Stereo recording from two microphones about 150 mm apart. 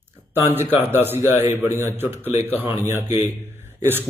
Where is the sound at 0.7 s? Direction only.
15° right (ahead or behind).